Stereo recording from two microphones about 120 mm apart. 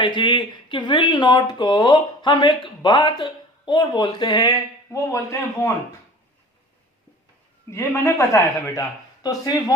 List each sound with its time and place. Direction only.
0.0 s speech: 40° left (ahead or behind); by 5.7 s 25° left (ahead or behind)
7.7 s a man's voice: 25° left (ahead or behind)